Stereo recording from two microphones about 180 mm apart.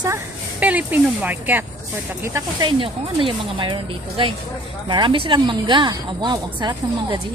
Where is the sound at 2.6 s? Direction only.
30° right (ahead or behind).